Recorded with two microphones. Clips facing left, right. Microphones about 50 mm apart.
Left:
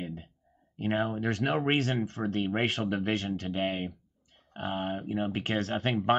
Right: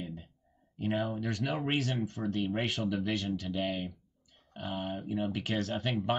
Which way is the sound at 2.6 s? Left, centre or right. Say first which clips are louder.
Left 4 dB; left.